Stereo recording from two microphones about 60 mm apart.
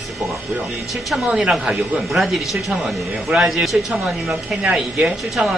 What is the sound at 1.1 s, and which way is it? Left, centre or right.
Speech, centre.